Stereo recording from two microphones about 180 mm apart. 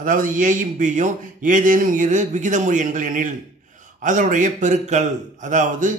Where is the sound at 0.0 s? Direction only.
50° right (ahead or behind).